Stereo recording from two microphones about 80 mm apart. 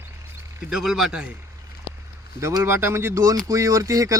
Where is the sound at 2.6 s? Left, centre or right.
Right.